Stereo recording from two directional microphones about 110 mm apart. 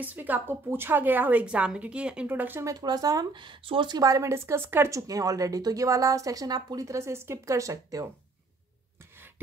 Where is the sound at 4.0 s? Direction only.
30° right (ahead or behind).